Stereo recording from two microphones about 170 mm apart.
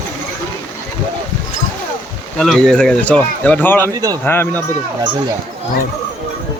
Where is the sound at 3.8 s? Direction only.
20° right (ahead or behind).